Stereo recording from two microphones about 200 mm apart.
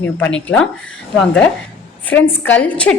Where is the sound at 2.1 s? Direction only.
65° left (ahead or behind).